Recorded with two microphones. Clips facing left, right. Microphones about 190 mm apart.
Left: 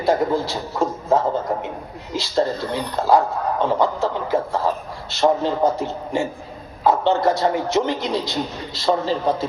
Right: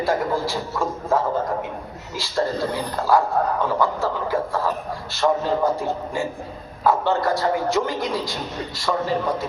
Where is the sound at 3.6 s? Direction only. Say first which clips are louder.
Left 2 dB; 20° left (ahead or behind).